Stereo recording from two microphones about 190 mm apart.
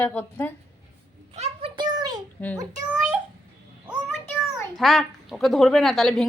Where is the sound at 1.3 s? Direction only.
30° right (ahead or behind).